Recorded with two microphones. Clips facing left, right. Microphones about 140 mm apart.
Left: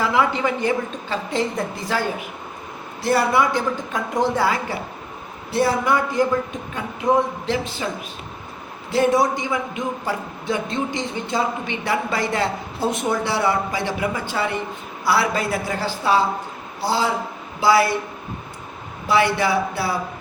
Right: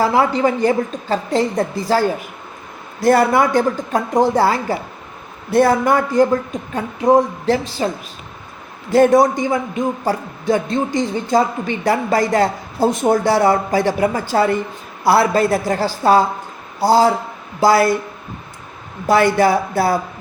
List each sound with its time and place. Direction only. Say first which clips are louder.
0.0 s a man's voice: right 5 dB; 35° right (ahead or behind)
3.0 s a man's voice: right 5 dB; 45° right (ahead or behind)
8.9 s a man's voice: right 6 dB; 45° right (ahead or behind)
19.0 s a man's voice: right 5 dB; 45° right (ahead or behind)